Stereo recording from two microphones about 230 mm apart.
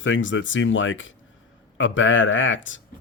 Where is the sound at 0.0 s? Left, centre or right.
Left.